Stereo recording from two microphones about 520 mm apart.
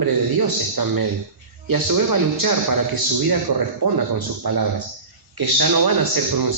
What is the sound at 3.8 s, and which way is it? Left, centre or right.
A man's voice, right.